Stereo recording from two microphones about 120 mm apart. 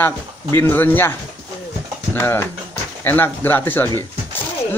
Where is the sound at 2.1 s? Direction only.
20° left (ahead or behind).